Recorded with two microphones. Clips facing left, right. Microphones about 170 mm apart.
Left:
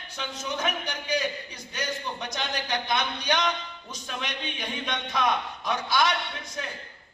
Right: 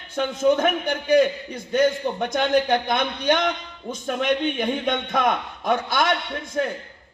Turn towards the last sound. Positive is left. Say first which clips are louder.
# right 10 dB
turn(degrees=-55)  # may be behind; listen again after turning